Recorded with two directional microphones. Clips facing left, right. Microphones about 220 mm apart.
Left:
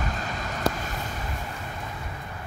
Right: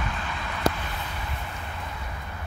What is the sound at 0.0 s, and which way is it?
Vehicle, 40° left (ahead or behind).